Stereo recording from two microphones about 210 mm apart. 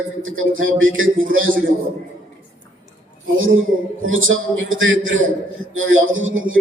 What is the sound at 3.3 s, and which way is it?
Speech, 70° right (ahead or behind).